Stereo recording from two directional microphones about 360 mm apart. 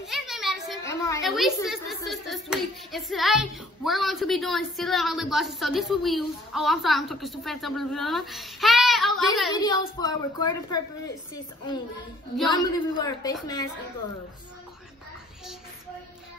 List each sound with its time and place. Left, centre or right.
0.0 s a child's voice: centre
9.5 s a woman's voice: centre
12.4 s a woman's voice: centre